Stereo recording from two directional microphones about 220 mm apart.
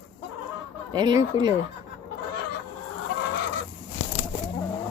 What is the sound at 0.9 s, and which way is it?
Speech, 20° right (ahead or behind).